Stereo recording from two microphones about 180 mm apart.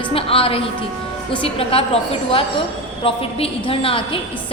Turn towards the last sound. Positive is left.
turn(degrees=30)  # may be behind; listen again after turning